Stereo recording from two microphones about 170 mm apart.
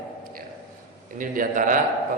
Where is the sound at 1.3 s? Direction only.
50° right (ahead or behind).